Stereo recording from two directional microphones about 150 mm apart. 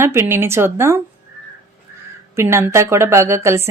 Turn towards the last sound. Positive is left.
turn(degrees=-20)  # may be behind; listen again after turning